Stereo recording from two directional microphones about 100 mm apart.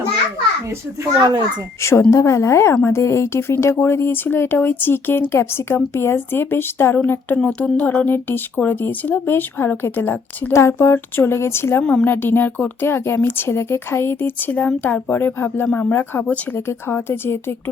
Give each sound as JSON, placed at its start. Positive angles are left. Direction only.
{"t": 1.8, "sound": "speech", "side_deg": 25}
{"t": 11.8, "sound": "speech", "side_deg": 10}